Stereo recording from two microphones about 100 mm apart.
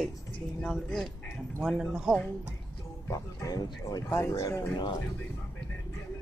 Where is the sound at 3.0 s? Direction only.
35° left (ahead or behind).